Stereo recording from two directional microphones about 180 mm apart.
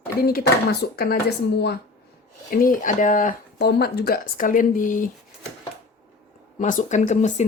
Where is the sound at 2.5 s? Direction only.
50° left (ahead or behind).